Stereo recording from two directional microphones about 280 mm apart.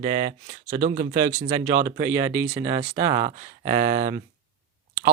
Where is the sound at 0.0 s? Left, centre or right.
Centre.